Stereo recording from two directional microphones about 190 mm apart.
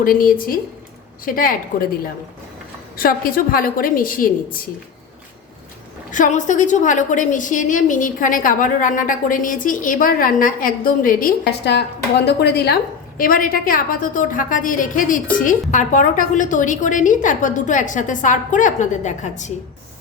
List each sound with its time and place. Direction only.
0.0 s a woman's voice: 50° left (ahead or behind)
3.0 s a woman's voice: 50° left (ahead or behind)
6.1 s a woman's voice: 40° left (ahead or behind)